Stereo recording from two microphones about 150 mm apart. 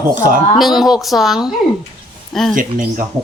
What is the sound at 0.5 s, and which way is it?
Speech, centre (ahead or behind).